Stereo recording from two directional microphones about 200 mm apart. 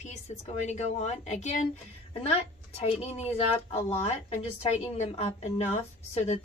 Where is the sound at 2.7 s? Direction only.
30° left (ahead or behind).